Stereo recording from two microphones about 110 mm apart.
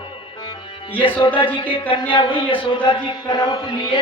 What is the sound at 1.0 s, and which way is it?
Music, 50° left (ahead or behind).